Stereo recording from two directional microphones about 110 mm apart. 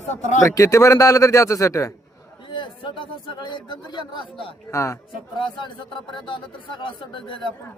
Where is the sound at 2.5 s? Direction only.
45° left (ahead or behind).